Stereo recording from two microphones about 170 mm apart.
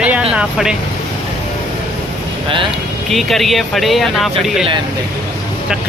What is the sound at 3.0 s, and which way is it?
Speech, centre (ahead or behind).